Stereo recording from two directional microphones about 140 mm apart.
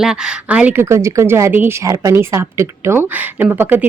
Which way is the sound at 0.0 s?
5° right (ahead or behind).